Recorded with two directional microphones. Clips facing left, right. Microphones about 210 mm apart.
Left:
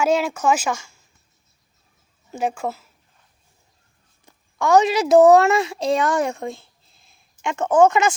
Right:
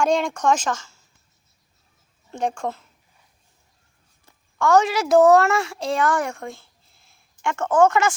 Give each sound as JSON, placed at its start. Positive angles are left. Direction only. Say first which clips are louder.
{"t": 0.0, "sound": "speech", "louder": "left 1 dB", "side_deg": 5}
{"t": 2.3, "sound": "speech", "louder": "left 1 dB", "side_deg": 5}
{"t": 4.3, "sound": "a child's voice", "louder": "left 1 dB", "side_deg": 15}